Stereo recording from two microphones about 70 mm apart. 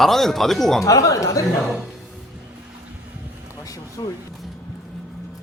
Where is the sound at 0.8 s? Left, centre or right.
Left.